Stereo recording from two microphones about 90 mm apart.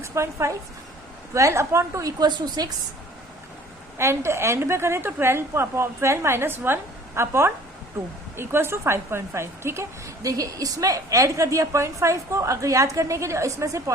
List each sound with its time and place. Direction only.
0.0 s a woman's voice: 30° right (ahead or behind); by 2.7 s 50° right (ahead or behind)
3.9 s a woman's voice: 30° right (ahead or behind)
10.2 s a woman's voice: 40° right (ahead or behind)